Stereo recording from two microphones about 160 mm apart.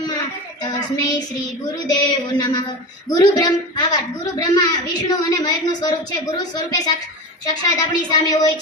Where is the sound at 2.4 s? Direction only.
25° left (ahead or behind).